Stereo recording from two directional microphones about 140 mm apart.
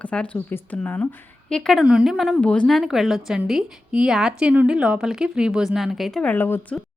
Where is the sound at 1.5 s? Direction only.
Centre (ahead or behind).